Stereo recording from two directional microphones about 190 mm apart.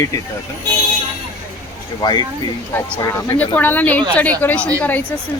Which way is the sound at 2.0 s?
20° left (ahead or behind).